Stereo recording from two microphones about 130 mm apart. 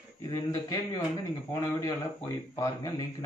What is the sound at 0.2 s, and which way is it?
Speech, 25° left (ahead or behind).